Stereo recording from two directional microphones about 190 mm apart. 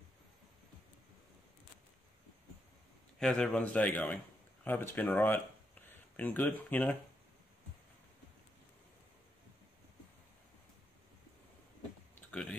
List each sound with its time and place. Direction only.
3.2 s a man's voice: 5° left (ahead or behind)
12.3 s typing: 5° left (ahead or behind)